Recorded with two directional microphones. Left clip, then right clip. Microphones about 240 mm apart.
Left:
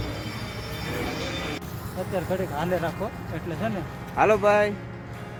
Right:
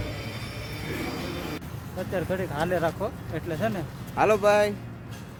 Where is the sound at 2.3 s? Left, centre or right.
Right.